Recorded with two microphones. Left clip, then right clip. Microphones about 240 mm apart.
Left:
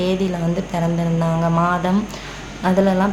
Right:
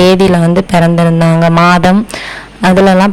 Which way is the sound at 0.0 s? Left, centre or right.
Right.